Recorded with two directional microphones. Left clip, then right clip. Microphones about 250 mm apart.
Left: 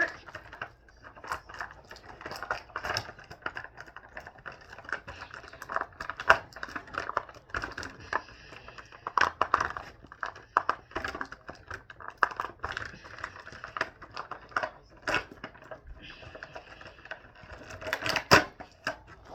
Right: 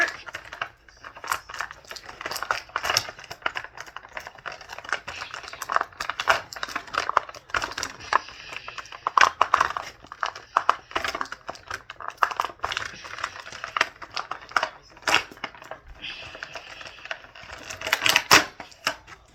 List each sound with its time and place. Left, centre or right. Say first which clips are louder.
0.3 s typing: right 8 dB; centre
1.2 s a sound: right 8 dB; centre
16.0 s typing: right 12 dB; centre
17.8 s typewriter: right 7 dB; centre